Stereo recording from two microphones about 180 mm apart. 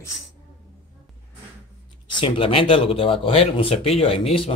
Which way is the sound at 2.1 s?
30° left (ahead or behind).